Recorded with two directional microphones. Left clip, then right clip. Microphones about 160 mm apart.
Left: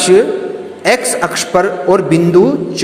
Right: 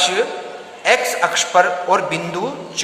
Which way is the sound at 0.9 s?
25° left (ahead or behind).